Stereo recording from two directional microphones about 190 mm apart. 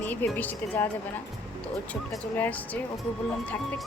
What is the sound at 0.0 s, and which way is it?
Speech, 10° left (ahead or behind).